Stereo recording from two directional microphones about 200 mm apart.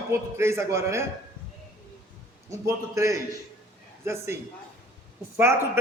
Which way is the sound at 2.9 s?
15° right (ahead or behind).